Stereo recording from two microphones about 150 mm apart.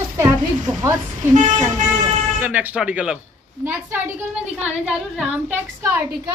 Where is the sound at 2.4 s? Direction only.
10° right (ahead or behind).